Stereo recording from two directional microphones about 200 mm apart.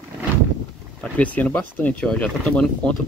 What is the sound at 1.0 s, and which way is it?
Speech, 5° left (ahead or behind).